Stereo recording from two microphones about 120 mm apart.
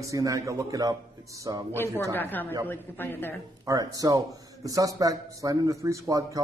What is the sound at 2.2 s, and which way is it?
A woman's voice, 15° left (ahead or behind).